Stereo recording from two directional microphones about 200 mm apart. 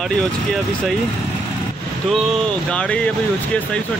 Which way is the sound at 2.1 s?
Centre (ahead or behind).